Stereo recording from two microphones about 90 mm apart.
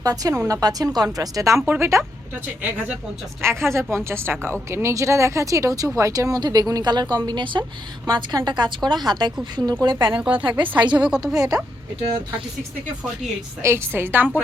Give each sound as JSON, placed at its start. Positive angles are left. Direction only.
{"t": 0.0, "sound": "a woman's voice", "side_deg": -45}
{"t": 1.6, "sound": "speech", "side_deg": -25}
{"t": 3.4, "sound": "a woman's voice", "side_deg": -30}
{"t": 10.9, "sound": "a woman's voice", "side_deg": -10}
{"t": 11.3, "sound": "a woman's voice", "side_deg": -45}
{"t": 13.6, "sound": "speech", "side_deg": -30}